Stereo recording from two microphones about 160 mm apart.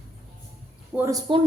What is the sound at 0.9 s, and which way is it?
Speech, 20° right (ahead or behind).